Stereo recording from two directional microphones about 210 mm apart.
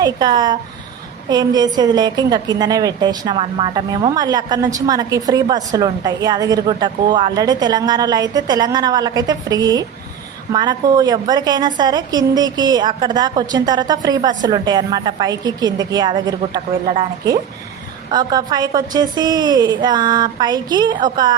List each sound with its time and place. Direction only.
0.0 s a woman's voice: 20° right (ahead or behind)